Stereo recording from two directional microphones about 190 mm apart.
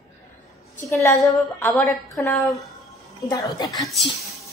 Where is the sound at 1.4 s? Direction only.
5° left (ahead or behind).